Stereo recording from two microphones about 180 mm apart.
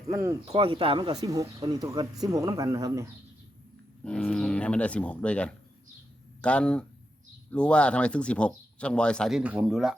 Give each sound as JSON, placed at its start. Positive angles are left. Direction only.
{"t": 0.1, "sound": "speech", "side_deg": -15}
{"t": 0.4, "sound": "speech", "side_deg": -30}
{"t": 4.0, "sound": "speech", "side_deg": 5}